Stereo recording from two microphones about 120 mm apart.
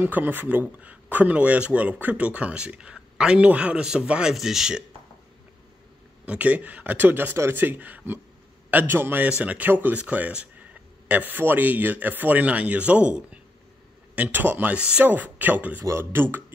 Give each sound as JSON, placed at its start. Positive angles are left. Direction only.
{"t": 0.0, "sound": "speech", "side_deg": -15}
{"t": 6.2, "sound": "speech", "side_deg": -10}